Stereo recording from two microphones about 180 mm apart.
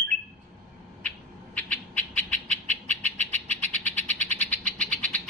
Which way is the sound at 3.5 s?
40° right (ahead or behind).